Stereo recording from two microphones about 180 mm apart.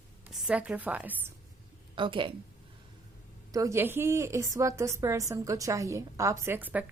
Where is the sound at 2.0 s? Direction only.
30° right (ahead or behind).